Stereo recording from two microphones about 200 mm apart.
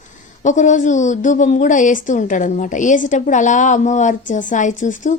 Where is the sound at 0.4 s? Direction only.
35° left (ahead or behind).